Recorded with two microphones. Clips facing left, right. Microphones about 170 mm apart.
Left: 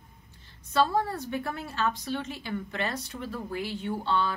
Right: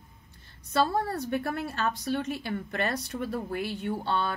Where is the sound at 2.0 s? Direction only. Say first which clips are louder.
Right 3 dB; 50° right (ahead or behind).